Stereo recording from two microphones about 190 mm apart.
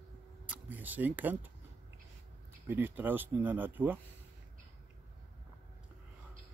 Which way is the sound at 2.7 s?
10° right (ahead or behind).